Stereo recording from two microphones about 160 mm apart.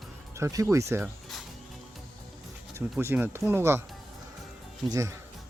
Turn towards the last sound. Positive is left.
turn(degrees=-20)  # may be behind; listen again after turning